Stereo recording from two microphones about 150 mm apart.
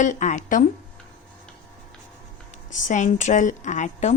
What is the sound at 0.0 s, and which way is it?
Speech, 55° left (ahead or behind).